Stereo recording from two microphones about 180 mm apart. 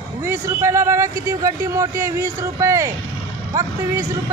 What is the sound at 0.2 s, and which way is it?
Speech, 15° right (ahead or behind).